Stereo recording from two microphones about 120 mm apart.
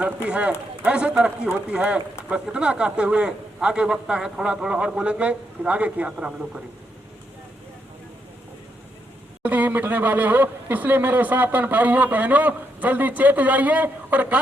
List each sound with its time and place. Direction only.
0.0 s speech: 10° right (ahead or behind)
9.4 s speech: 15° right (ahead or behind)